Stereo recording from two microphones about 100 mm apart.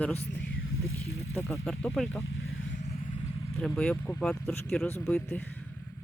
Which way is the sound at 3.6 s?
10° left (ahead or behind).